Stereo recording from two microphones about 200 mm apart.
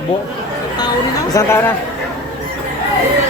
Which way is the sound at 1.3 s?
10° left (ahead or behind).